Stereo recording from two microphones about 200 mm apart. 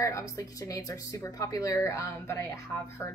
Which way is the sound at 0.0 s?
15° left (ahead or behind).